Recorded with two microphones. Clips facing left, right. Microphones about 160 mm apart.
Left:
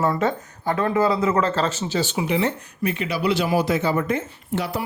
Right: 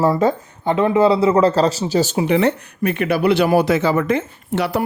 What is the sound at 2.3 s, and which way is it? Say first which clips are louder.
Speech: right 6 dB; 60° right (ahead or behind).